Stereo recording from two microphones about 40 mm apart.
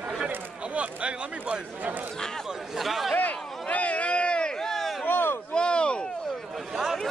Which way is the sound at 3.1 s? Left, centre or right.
Left.